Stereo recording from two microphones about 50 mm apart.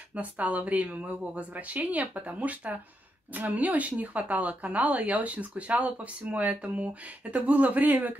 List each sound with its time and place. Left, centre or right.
0.1 s speech: right